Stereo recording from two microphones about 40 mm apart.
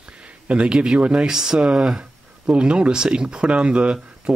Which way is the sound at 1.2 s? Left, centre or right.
Centre.